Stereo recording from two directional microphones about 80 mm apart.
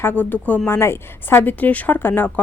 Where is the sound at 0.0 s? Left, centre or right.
Left.